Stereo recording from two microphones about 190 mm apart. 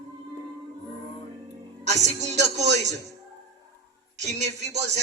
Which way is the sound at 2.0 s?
35° right (ahead or behind).